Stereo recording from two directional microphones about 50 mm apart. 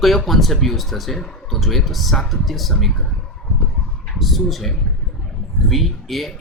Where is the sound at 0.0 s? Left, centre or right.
Centre.